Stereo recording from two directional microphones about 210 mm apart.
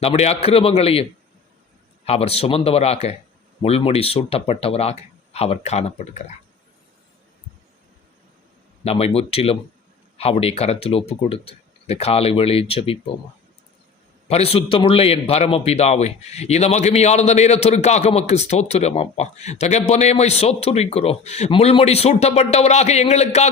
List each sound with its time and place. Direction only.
0.0 s speech: 30° left (ahead or behind)
2.0 s speech: 30° left (ahead or behind)
8.8 s speech: 30° left (ahead or behind)
14.3 s a man's voice: 30° left (ahead or behind)